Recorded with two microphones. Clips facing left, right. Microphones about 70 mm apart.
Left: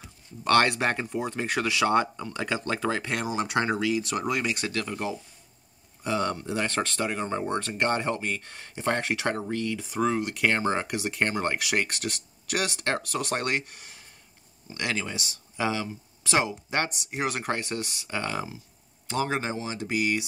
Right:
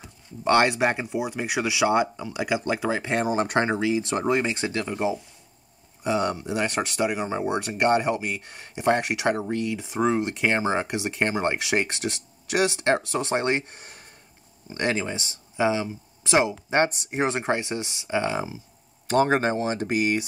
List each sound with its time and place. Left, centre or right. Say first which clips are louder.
0.4 s speech: right 2 dB; centre
3.1 s speech: right 5 dB; right
16.9 s speech: right 5 dB; right; by 18.6 s centre
19.0 s speech: right 7 dB; right